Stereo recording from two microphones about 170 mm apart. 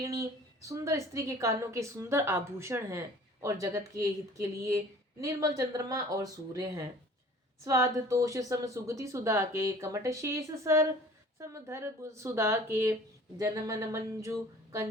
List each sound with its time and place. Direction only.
0.0 s a woman's voice: 20° right (ahead or behind)